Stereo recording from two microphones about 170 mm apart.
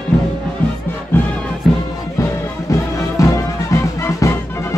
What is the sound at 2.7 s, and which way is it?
Music, 20° left (ahead or behind).